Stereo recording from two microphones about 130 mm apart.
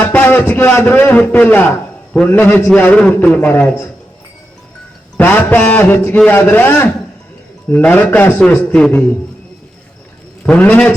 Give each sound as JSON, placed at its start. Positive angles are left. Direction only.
{"t": 0.0, "sound": "music", "side_deg": 15}
{"t": 1.2, "sound": "a man's voice", "side_deg": 10}
{"t": 5.2, "sound": "a man's voice", "side_deg": 15}
{"t": 10.4, "sound": "a man's voice", "side_deg": 10}